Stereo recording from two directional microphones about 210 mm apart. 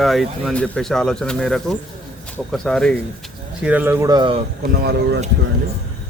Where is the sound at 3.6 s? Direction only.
5° right (ahead or behind).